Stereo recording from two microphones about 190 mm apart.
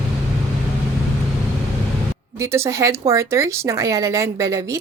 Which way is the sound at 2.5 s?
15° right (ahead or behind).